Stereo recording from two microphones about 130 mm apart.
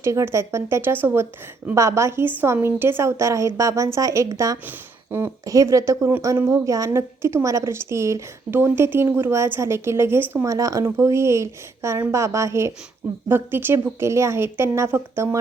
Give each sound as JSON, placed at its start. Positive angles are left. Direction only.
{"t": 0.0, "sound": "a woman's voice", "side_deg": -20}